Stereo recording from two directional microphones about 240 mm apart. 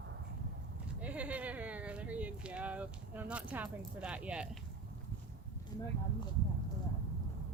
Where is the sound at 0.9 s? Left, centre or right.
Centre.